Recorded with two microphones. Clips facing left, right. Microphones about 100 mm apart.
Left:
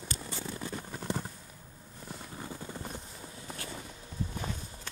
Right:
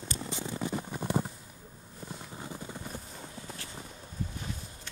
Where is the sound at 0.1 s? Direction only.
20° right (ahead or behind).